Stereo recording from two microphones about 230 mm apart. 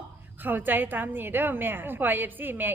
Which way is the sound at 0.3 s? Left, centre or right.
Centre.